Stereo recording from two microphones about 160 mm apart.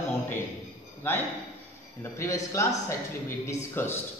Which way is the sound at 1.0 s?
15° left (ahead or behind).